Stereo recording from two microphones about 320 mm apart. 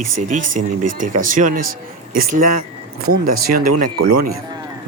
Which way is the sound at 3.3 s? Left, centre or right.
Right.